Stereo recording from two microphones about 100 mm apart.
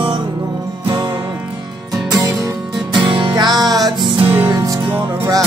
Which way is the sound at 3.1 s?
50° right (ahead or behind).